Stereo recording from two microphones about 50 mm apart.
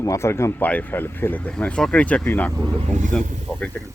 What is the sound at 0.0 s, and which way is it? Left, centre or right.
Speech, left.